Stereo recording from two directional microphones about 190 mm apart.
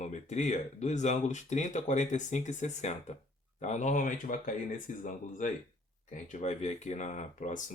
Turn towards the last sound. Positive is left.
turn(degrees=40)  # may be behind; listen again after turning